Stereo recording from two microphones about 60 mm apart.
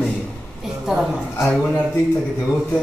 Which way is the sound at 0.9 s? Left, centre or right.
Centre.